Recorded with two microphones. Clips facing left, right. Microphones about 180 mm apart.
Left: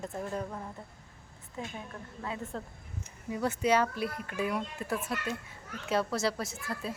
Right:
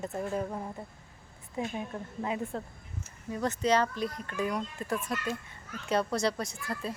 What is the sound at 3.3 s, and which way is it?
A child's voice, 10° left (ahead or behind).